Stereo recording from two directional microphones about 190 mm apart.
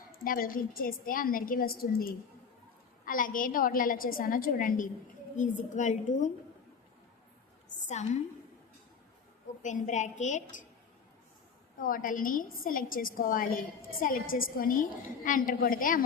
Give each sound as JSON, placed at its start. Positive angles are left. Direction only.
{"t": 0.3, "sound": "a woman's voice", "side_deg": 50}
{"t": 7.9, "sound": "a woman's voice", "side_deg": 40}
{"t": 9.6, "sound": "a woman's voice", "side_deg": 40}
{"t": 11.8, "sound": "a woman's voice", "side_deg": 45}